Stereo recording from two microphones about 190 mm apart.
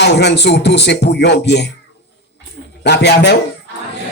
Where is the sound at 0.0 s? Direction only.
60° left (ahead or behind).